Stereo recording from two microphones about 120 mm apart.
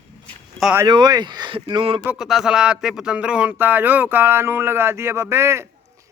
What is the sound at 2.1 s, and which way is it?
Speech, 5° right (ahead or behind).